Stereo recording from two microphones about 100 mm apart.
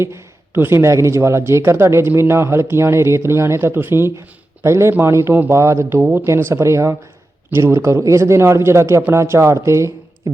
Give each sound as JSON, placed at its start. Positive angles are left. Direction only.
{"t": 0.0, "sound": "speech", "side_deg": -25}